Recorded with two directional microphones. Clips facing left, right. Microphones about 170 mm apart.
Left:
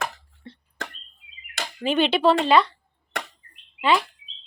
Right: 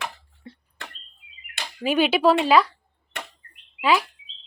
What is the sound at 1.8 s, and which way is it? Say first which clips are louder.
Speech: right 1 dB; 5° right (ahead or behind).